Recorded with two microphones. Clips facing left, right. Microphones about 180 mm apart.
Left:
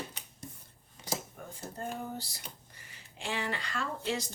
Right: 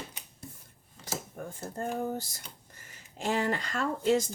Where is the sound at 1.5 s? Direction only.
45° right (ahead or behind).